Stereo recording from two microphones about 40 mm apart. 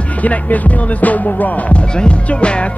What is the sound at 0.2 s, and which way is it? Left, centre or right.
Music, left.